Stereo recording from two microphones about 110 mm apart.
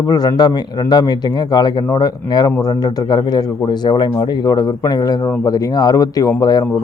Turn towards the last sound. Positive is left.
turn(degrees=35)  # may be behind; listen again after turning